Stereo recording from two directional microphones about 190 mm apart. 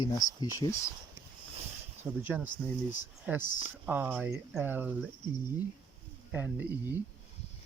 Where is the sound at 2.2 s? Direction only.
10° right (ahead or behind).